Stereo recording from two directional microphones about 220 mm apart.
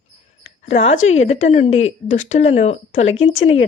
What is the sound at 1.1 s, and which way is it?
Speech, 30° left (ahead or behind).